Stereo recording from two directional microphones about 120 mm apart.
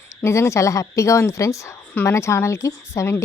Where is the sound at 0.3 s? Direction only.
25° left (ahead or behind).